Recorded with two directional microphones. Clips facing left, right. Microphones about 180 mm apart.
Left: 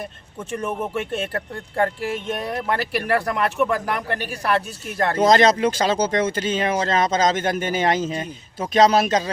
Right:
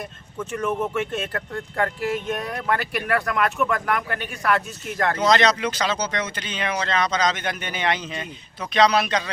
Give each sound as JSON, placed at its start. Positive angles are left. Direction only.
{"t": 0.3, "sound": "speech", "side_deg": 30}
{"t": 5.2, "sound": "speech", "side_deg": 45}